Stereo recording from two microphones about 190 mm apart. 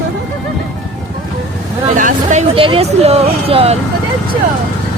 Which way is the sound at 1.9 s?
40° right (ahead or behind).